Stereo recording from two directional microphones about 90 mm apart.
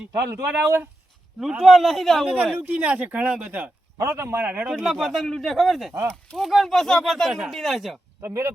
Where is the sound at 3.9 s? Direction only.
30° right (ahead or behind).